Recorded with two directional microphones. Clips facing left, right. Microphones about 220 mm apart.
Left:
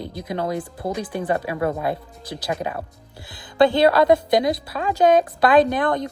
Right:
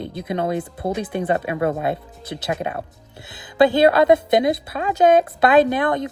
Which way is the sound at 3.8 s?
20° right (ahead or behind).